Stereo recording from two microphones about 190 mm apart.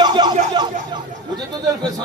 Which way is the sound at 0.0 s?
25° right (ahead or behind).